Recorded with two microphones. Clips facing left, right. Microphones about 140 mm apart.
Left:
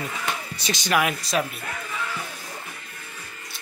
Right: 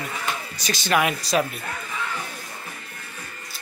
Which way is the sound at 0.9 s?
Centre (ahead or behind).